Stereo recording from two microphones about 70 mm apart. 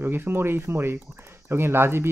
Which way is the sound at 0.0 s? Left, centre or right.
Right.